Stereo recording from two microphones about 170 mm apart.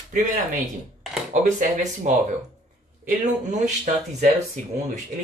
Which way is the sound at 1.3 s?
45° right (ahead or behind).